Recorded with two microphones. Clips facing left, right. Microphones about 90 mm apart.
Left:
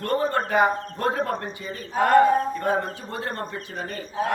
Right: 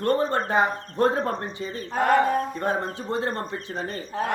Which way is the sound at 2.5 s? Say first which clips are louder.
Left 2 dB; 25° right (ahead or behind).